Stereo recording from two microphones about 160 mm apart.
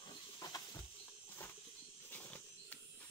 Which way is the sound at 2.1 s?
10° left (ahead or behind).